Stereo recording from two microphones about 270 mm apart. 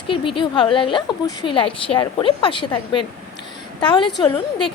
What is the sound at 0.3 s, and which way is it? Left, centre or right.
A woman's voice, centre.